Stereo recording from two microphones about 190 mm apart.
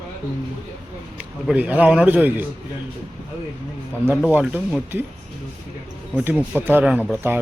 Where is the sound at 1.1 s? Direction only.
5° right (ahead or behind).